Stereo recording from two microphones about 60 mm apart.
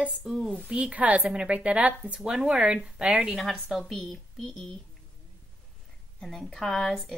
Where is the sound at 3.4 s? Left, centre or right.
Centre.